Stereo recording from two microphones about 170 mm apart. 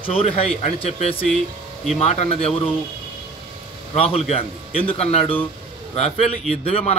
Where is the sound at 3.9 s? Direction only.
35° left (ahead or behind).